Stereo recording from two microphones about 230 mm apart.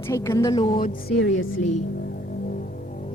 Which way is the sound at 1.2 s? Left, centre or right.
Left.